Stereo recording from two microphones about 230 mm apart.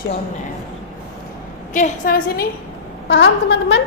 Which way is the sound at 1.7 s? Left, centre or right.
Left.